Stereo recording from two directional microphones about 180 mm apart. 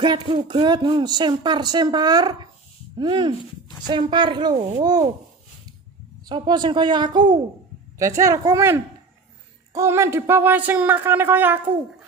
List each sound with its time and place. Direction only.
0.0 s speech: 25° right (ahead or behind)
6.2 s speech: 25° right (ahead or behind)